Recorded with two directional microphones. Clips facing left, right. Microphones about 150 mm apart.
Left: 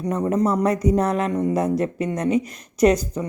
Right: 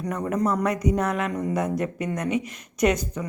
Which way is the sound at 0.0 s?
25° left (ahead or behind).